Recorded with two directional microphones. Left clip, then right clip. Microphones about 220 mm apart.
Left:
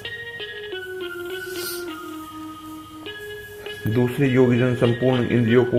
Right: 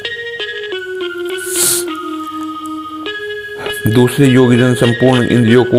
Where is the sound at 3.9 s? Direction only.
45° right (ahead or behind).